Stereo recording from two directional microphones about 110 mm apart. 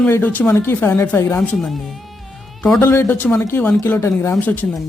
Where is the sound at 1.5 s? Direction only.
Centre (ahead or behind).